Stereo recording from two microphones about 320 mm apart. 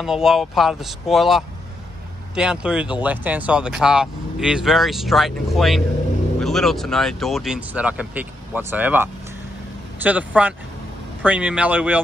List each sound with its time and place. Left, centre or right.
0.0 s speech: centre